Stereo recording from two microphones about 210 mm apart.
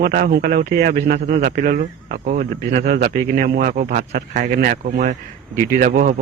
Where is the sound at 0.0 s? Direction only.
45° right (ahead or behind).